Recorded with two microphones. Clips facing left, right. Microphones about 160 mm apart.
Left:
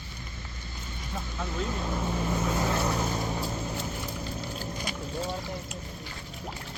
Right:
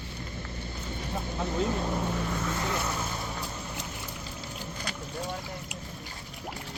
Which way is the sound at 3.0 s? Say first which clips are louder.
Left 5 dB; 40° left (ahead or behind).